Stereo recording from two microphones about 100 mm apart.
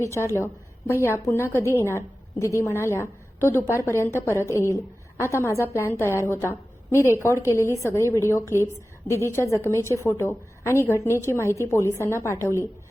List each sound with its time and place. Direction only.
0.0 s a woman's voice: 30° left (ahead or behind)